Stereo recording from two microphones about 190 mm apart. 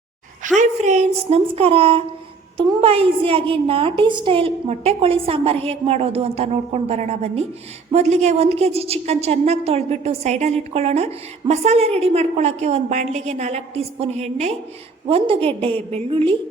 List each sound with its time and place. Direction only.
0.4 s a woman's voice: 40° right (ahead or behind)